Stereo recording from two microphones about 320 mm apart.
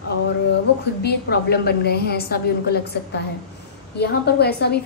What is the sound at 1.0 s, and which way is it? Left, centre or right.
A woman's voice, left.